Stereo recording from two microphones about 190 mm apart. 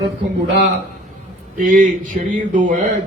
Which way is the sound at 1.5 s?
45° right (ahead or behind).